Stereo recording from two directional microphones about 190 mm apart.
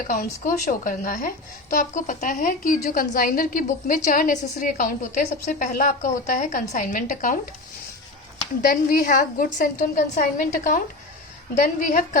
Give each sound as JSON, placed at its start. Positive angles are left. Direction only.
{"t": 0.1, "sound": "a woman's voice", "side_deg": 45}
{"t": 8.6, "sound": "a woman's voice", "side_deg": 45}